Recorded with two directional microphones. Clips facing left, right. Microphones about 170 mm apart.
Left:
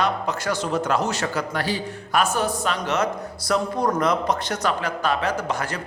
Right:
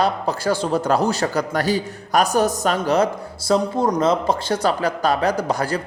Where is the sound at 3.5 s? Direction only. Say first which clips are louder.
Right 4 dB; 25° right (ahead or behind).